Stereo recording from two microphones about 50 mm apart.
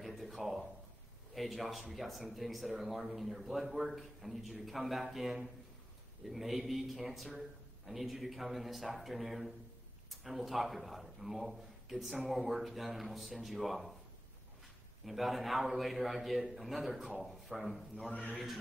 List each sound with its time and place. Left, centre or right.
0.0 s a sound: centre
1.3 s a man's voice: centre
15.0 s a man's voice: centre
18.1 s a man's voice: left